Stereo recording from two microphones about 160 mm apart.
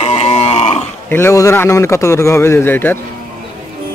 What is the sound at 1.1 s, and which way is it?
A man's voice, 15° left (ahead or behind).